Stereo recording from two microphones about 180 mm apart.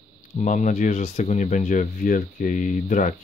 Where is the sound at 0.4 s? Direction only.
40° left (ahead or behind).